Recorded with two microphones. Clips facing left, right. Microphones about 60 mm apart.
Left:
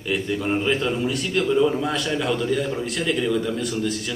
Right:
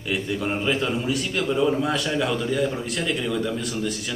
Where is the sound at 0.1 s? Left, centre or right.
Centre.